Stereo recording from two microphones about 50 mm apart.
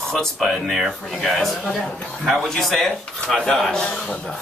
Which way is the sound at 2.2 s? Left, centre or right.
Centre.